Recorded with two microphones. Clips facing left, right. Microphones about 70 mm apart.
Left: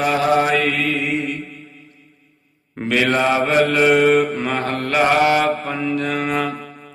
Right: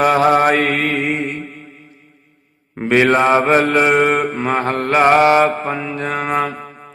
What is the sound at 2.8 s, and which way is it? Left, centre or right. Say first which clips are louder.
Mantra: right 4 dB; right.